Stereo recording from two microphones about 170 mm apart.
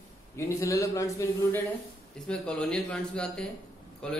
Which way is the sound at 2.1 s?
5° left (ahead or behind).